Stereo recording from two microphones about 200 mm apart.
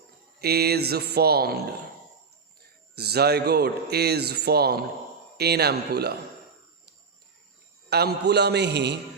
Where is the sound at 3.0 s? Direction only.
55° right (ahead or behind).